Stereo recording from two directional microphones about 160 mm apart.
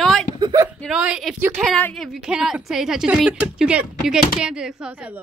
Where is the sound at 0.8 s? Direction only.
5° right (ahead or behind).